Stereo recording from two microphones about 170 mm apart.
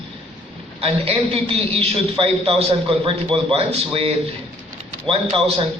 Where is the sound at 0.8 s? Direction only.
35° right (ahead or behind).